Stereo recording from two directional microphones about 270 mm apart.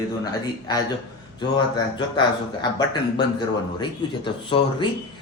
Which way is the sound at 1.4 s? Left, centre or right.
Centre.